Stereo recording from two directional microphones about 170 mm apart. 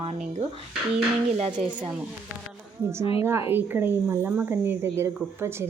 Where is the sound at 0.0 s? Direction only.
35° right (ahead or behind).